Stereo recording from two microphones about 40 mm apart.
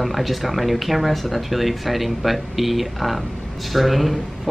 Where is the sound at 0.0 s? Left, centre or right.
Centre.